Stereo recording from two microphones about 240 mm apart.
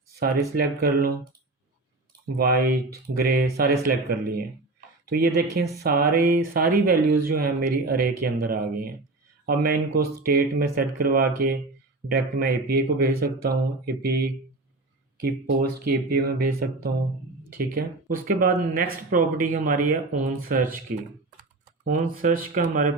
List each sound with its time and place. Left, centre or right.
0.2 s speech: right
2.4 s speech: right
15.9 s speech: right